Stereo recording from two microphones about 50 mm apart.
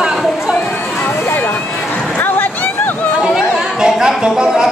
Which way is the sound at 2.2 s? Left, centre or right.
Left.